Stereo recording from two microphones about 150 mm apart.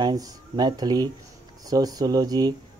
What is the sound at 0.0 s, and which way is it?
Speech, 25° right (ahead or behind).